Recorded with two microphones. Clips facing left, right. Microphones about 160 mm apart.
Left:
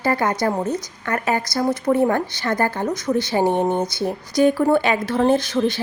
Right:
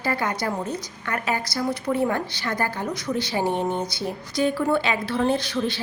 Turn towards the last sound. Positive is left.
turn(degrees=45)  # may be behind; listen again after turning